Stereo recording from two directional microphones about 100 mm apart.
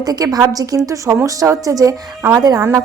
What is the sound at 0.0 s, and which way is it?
Speech, 40° right (ahead or behind).